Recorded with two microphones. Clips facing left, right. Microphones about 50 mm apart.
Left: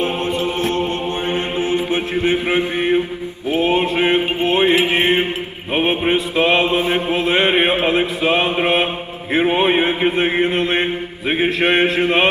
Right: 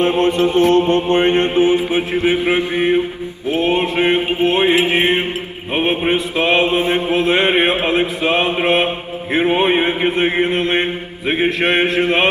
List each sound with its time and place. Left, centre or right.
0.0 s mantra: right
1.5 s chant: right
3.5 s mantra: centre